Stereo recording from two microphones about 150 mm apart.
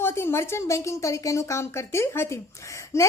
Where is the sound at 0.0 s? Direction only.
15° left (ahead or behind).